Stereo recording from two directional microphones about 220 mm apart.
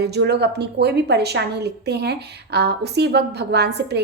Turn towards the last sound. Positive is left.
turn(degrees=-50)  # may be behind; listen again after turning